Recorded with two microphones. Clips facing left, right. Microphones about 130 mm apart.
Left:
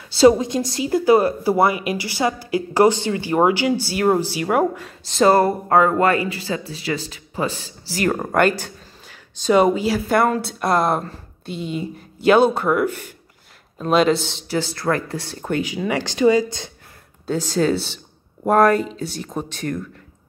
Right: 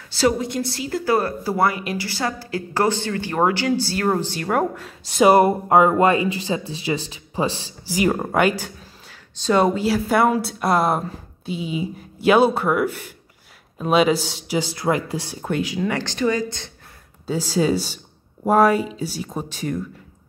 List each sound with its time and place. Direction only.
0.2 s speech: 20° left (ahead or behind); by 4.9 s centre (ahead or behind)
5.0 s speech: 10° right (ahead or behind)
8.1 s speech: 5° right (ahead or behind)
14.7 s speech: 15° right (ahead or behind)
15.4 s speech: centre (ahead or behind)
17.3 s speech: 5° right (ahead or behind)